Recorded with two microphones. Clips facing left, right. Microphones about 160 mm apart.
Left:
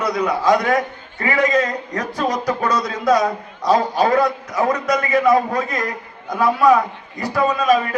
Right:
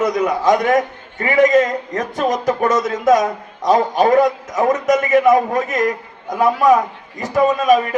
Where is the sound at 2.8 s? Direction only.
45° right (ahead or behind).